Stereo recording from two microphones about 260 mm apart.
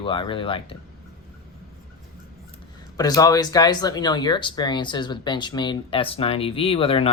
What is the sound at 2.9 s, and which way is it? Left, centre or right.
Speech, centre.